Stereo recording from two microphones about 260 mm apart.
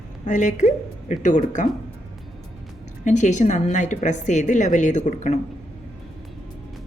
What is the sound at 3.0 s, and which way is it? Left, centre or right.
Speech, left.